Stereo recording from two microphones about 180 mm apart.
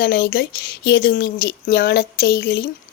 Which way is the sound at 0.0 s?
60° left (ahead or behind).